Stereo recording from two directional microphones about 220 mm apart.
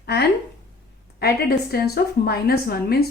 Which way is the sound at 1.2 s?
45° left (ahead or behind).